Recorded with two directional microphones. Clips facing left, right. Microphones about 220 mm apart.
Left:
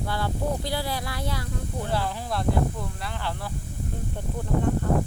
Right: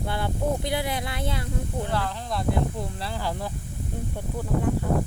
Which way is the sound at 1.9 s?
10° left (ahead or behind).